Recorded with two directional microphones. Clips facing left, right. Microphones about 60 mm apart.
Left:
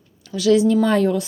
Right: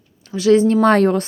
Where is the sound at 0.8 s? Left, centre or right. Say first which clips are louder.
Right 4 dB; right.